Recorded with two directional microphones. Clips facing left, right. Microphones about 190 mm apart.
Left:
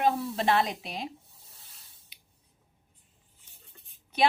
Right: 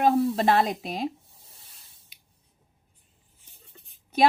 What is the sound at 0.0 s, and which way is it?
Speech, 45° right (ahead or behind).